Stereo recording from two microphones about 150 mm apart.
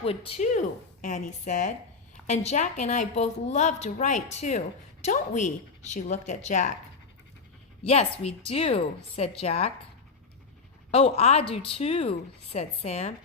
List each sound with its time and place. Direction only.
0.0 s a woman's voice: 40° left (ahead or behind); by 6.7 s 55° left (ahead or behind)
8.2 s a woman's voice: 40° left (ahead or behind)
10.9 s a woman's voice: 45° left (ahead or behind)